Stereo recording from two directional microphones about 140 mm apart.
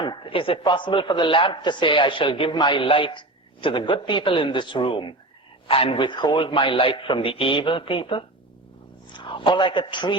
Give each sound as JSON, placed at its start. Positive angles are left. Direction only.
{"t": 0.0, "sound": "a man's voice", "side_deg": 35}